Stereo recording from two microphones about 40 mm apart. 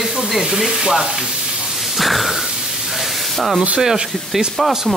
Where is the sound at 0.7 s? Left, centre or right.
Centre.